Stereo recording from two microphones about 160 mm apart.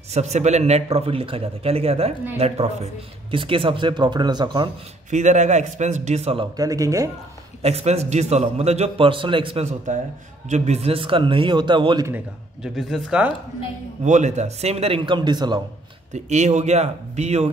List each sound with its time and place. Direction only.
0.1 s speech: 45° right (ahead or behind); by 4.6 s 25° right (ahead or behind)
5.1 s speech: 45° right (ahead or behind)
6.5 s speech: 20° right (ahead or behind)
7.6 s speech: 40° right (ahead or behind)
12.6 s speech: 5° right (ahead or behind)
14.0 s speech: 50° right (ahead or behind); by 15.6 s 25° right (ahead or behind)
16.1 s speech: 45° right (ahead or behind)